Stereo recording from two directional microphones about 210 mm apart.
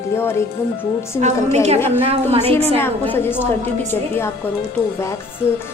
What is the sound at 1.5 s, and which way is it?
A woman's voice, 30° right (ahead or behind).